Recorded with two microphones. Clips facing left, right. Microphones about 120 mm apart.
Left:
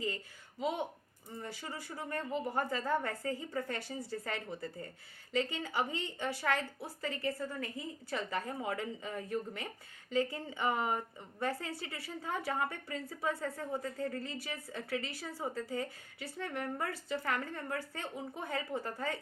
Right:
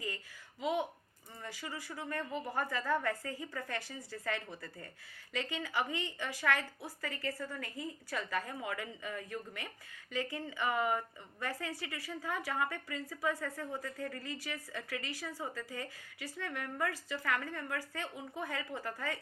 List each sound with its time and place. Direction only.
1.4 s a woman's voice: 30° left (ahead or behind)